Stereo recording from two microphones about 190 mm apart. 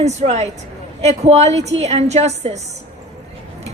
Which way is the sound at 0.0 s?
35° right (ahead or behind).